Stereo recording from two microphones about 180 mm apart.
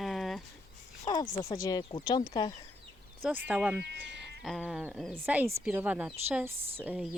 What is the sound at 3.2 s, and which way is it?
Speech, 5° right (ahead or behind).